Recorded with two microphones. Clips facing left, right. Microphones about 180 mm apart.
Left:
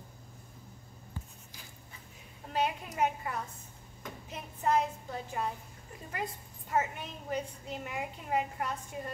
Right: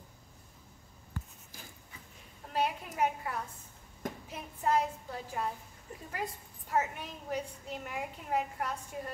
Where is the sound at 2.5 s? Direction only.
Centre (ahead or behind).